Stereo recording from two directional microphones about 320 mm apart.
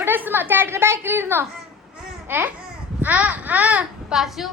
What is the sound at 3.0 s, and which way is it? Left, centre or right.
A woman's voice, centre.